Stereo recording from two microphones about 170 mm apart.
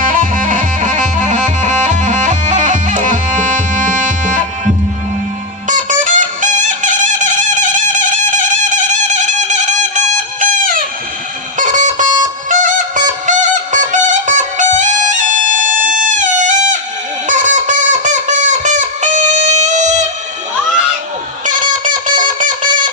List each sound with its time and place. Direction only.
0.0 s music: 50° right (ahead or behind)
5.6 s music: 45° right (ahead or behind)
17.2 s fowl: 45° right (ahead or behind)
21.4 s music: 50° right (ahead or behind)